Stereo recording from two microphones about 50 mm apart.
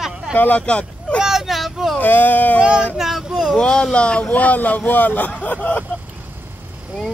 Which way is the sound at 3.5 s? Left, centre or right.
Centre.